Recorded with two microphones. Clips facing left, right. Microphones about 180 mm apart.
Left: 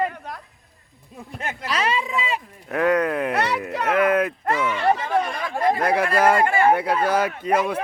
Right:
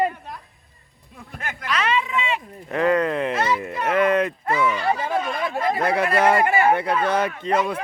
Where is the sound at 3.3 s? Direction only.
70° left (ahead or behind).